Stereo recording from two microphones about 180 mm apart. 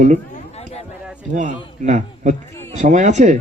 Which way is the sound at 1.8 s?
40° right (ahead or behind).